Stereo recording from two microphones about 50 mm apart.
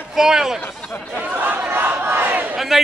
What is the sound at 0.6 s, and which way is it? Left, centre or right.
Speech, left.